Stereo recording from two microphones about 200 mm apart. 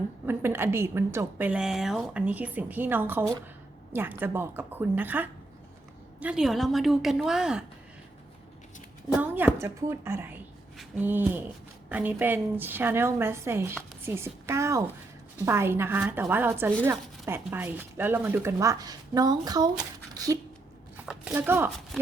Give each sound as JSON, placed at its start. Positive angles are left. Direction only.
{"t": 0.3, "sound": "a woman's voice", "side_deg": -10}
{"t": 9.1, "sound": "speech", "side_deg": -10}
{"t": 20.9, "sound": "speech", "side_deg": -5}